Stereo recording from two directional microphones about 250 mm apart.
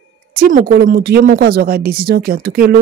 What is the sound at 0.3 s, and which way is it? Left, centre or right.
Speech, right.